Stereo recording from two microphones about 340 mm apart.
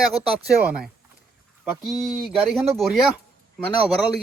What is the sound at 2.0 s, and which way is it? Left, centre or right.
Speech, centre.